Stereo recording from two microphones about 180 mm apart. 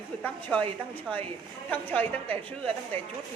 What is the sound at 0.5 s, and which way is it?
Speech, 5° left (ahead or behind).